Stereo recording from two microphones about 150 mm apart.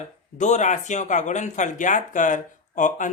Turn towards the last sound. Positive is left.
turn(degrees=60)  # may be behind; listen again after turning